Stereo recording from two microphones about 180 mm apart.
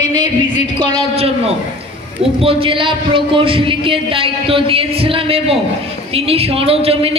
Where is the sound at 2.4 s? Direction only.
30° right (ahead or behind).